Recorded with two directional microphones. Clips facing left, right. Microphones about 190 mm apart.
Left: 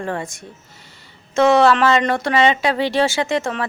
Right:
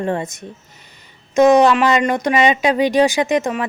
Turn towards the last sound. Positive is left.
turn(degrees=-15)  # may be behind; listen again after turning